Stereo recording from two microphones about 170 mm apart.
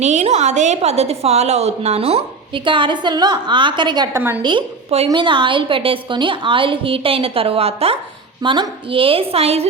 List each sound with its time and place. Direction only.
0.0 s a woman's voice: 45° right (ahead or behind)